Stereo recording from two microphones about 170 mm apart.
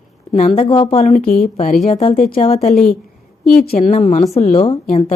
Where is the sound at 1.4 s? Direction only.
40° left (ahead or behind).